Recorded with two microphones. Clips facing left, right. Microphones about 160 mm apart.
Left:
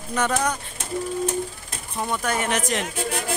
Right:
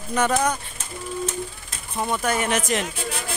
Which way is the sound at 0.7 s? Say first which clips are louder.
Left 4 dB; 65° left (ahead or behind).